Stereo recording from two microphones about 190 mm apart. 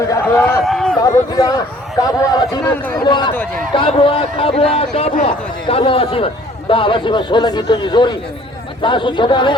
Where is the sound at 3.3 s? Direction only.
10° left (ahead or behind).